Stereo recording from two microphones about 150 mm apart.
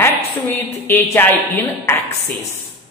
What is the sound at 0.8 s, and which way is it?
A woman's voice, 15° left (ahead or behind).